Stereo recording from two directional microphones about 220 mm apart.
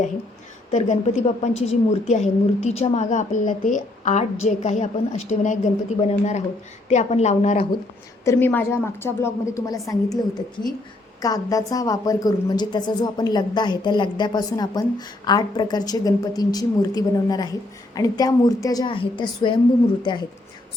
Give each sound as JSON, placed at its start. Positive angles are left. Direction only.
{"t": 0.7, "sound": "a woman's voice", "side_deg": 30}
{"t": 8.2, "sound": "a woman's voice", "side_deg": 10}
{"t": 11.2, "sound": "a woman's voice", "side_deg": 15}